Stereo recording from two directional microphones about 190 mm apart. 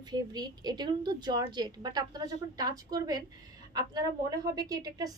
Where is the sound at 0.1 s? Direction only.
20° right (ahead or behind).